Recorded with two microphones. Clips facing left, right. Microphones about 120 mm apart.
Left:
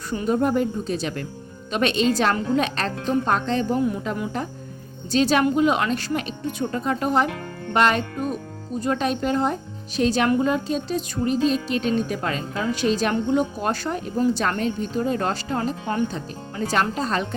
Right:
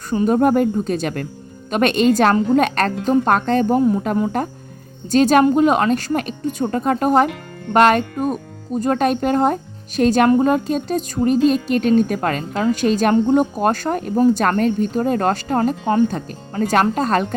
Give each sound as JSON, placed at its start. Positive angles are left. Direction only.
{"t": 0.3, "sound": "a woman's voice", "side_deg": -50}
{"t": 16.0, "sound": "a woman's voice", "side_deg": -50}